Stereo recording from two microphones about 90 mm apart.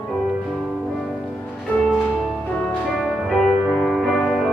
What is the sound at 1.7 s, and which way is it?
Music, 20° left (ahead or behind).